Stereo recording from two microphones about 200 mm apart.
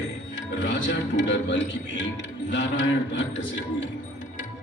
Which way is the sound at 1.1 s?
65° left (ahead or behind).